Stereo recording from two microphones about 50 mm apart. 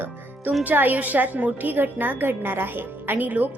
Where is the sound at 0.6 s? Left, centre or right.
Right.